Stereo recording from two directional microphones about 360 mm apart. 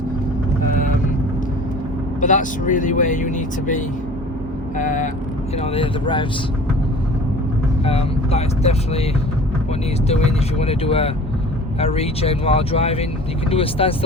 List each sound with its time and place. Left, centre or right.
2.2 s speech: left
7.9 s speech: centre
10.1 s speech: centre